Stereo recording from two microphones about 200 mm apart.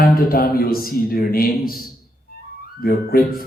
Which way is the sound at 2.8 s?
50° left (ahead or behind).